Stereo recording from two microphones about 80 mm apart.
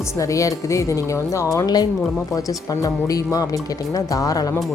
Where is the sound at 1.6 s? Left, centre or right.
Left.